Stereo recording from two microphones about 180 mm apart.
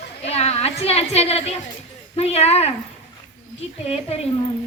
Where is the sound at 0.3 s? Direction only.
35° left (ahead or behind).